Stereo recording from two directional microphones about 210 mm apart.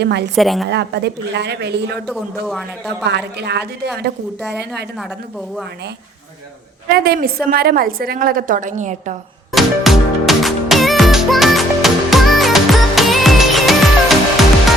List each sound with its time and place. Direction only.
0.0 s a woman's voice: 55° right (ahead or behind)
0.3 s a man's voice: centre (ahead or behind)
0.7 s a woman's voice: 55° right (ahead or behind)
2.0 s a man's voice: centre (ahead or behind)
3.0 s a woman's voice: 55° right (ahead or behind)
6.9 s a woman's voice: 45° right (ahead or behind)
9.5 s music: centre (ahead or behind)